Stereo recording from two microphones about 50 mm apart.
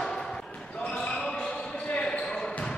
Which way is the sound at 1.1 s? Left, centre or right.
Centre.